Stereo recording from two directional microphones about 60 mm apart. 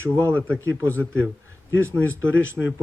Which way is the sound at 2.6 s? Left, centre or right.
Centre.